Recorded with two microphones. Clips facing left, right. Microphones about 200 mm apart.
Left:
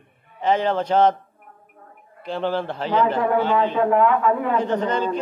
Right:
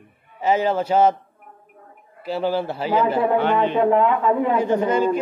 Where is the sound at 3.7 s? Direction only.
20° right (ahead or behind).